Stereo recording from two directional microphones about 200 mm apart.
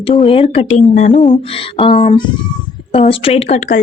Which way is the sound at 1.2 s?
25° left (ahead or behind).